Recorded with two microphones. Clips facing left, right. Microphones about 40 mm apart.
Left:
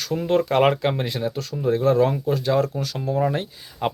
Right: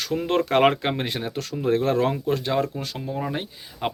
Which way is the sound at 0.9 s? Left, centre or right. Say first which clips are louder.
Left 2 dB; right.